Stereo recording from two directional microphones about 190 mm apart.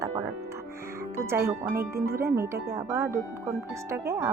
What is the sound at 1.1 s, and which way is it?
Speech, 15° right (ahead or behind).